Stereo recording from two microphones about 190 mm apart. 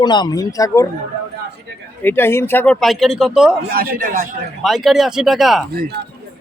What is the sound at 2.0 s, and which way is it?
Speech, 10° left (ahead or behind).